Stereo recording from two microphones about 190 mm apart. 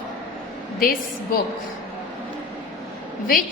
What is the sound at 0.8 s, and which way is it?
Speech, 50° left (ahead or behind).